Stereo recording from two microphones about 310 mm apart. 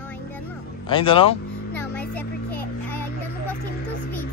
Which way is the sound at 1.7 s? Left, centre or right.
Centre.